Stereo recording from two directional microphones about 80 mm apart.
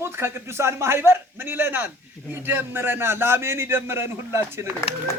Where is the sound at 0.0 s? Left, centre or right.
Right.